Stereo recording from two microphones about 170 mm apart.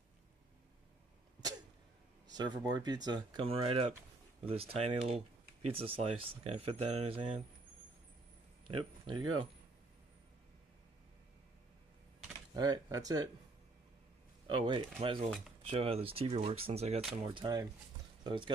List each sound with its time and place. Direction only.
2.2 s speech: 25° right (ahead or behind)
8.6 s speech: 30° right (ahead or behind)
12.5 s speech: 20° right (ahead or behind)
14.5 s speech: 30° right (ahead or behind)